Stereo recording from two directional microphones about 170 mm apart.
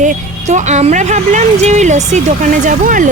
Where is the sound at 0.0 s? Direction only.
45° right (ahead or behind).